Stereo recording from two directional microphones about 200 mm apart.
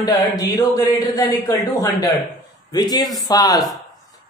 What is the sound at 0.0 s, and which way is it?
A man's voice, 20° left (ahead or behind).